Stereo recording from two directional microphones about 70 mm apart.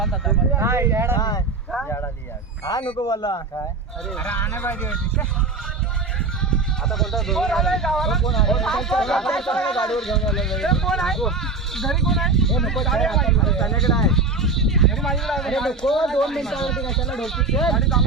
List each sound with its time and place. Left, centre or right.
0.0 s speech: centre
0.5 s speech: right
1.1 s speech: left
3.0 s speech: left
4.2 s speech: centre
6.9 s speech: centre